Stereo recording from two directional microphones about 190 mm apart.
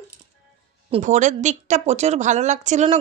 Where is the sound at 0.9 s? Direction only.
40° right (ahead or behind).